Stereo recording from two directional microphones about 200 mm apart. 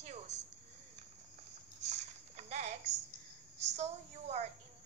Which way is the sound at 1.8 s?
35° right (ahead or behind).